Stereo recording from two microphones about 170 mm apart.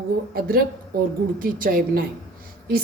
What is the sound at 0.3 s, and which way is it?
A woman's voice, 60° right (ahead or behind).